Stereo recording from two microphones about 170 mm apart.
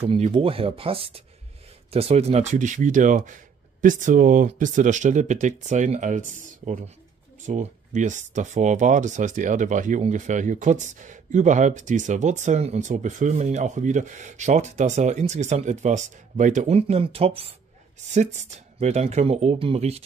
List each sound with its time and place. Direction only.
0.0 s speech: 35° right (ahead or behind)
7.4 s speech: 45° right (ahead or behind)